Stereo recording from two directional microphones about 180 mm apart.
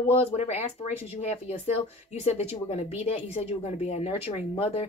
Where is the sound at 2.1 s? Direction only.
35° left (ahead or behind).